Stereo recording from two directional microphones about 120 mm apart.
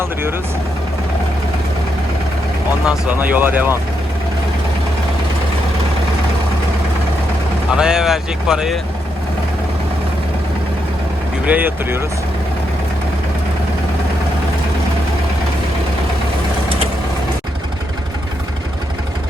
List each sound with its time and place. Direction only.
0.0 s speech: 20° right (ahead or behind)
2.8 s speech: 10° right (ahead or behind)
7.8 s speech: 5° right (ahead or behind)
11.4 s speech: 15° right (ahead or behind)